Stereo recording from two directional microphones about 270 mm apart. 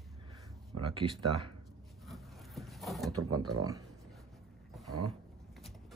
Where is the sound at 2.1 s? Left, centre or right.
Centre.